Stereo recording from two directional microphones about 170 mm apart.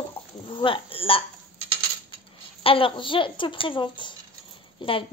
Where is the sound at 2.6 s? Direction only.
30° left (ahead or behind).